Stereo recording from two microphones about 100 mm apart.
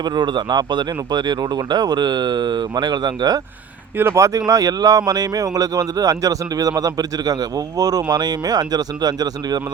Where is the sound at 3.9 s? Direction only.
25° right (ahead or behind).